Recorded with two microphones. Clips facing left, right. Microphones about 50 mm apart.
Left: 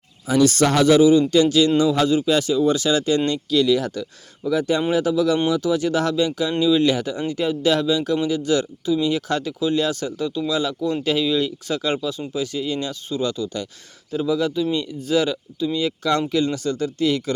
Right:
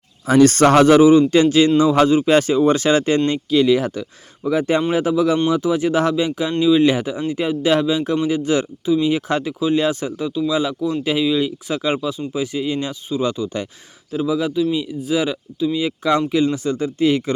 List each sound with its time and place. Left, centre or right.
0.3 s speech: right
3.2 s speech: right
14.1 s speech: centre